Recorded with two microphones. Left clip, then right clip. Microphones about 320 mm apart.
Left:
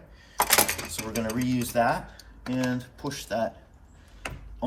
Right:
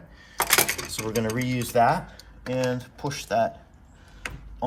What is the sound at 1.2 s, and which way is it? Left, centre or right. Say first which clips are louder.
Speech: right 2 dB; right.